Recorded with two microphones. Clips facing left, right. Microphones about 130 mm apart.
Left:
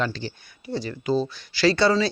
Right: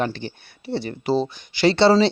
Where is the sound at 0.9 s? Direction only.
30° right (ahead or behind).